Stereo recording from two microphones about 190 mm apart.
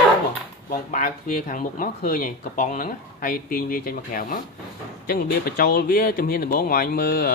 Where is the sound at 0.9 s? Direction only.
45° left (ahead or behind).